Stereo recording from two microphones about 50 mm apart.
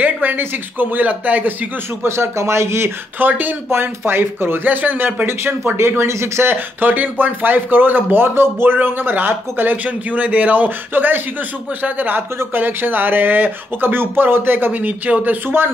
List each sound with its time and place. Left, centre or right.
0.0 s speech: right
2.0 s speech: right
3.2 s speech: right
15.4 s speech: right